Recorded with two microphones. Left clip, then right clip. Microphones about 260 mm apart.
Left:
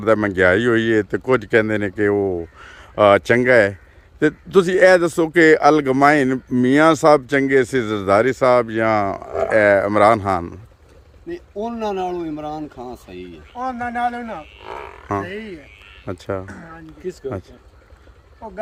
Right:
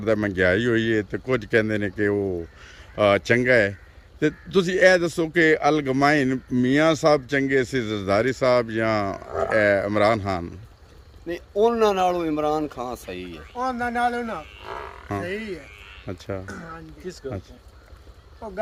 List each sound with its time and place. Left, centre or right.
0.0 s a man's voice: centre
11.3 s speech: centre
13.6 s a man's voice: centre
14.6 s livestock: left
15.2 s a man's voice: centre
17.0 s speech: left